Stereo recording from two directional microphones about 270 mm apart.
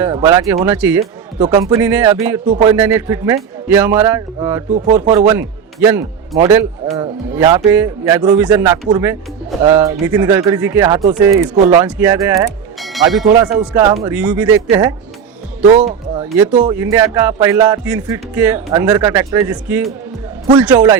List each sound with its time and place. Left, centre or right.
0.0 s speech: centre
12.8 s speech: centre
15.6 s speech: right
16.2 s speech: centre